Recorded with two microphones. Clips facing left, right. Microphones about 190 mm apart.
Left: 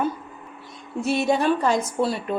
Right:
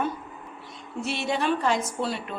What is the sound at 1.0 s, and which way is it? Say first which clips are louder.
Speech: left 6 dB; 40° left (ahead or behind).